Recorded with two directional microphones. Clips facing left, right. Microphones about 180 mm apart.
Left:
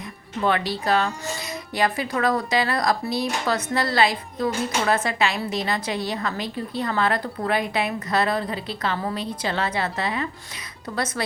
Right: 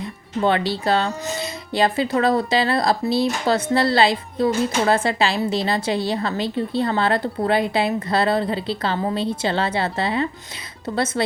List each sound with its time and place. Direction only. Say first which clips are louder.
0.0 s a woman's voice: right 4 dB; 30° right (ahead or behind)